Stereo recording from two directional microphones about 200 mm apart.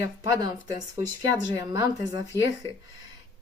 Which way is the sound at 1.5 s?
20° right (ahead or behind).